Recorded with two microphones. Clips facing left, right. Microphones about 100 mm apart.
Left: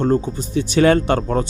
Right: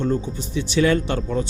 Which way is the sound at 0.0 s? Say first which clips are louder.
Left 5 dB; 50° left (ahead or behind).